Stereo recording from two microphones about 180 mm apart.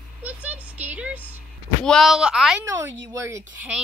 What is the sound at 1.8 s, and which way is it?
Speech, centre (ahead or behind).